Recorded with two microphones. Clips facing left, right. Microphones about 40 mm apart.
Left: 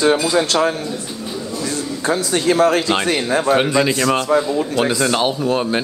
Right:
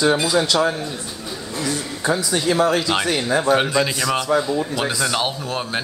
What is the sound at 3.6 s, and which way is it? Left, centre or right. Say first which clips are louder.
Speech: left 4 dB; centre.